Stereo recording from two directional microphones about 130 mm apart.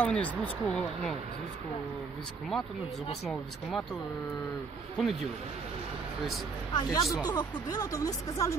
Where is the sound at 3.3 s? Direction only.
Centre (ahead or behind).